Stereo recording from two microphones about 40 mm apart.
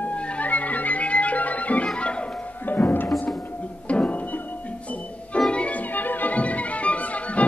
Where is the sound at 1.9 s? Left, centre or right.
Left.